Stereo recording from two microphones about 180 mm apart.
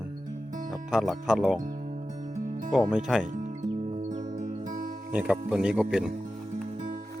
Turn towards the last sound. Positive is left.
turn(degrees=-5)  # may be behind; listen again after turning